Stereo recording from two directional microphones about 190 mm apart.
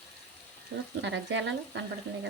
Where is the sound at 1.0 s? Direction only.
70° right (ahead or behind).